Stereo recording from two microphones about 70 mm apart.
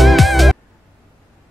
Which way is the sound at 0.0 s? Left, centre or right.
Centre.